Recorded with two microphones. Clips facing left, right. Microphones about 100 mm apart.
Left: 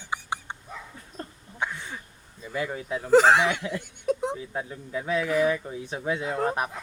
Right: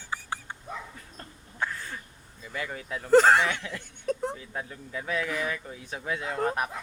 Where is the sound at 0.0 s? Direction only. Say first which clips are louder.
Left 3 dB; 20° left (ahead or behind).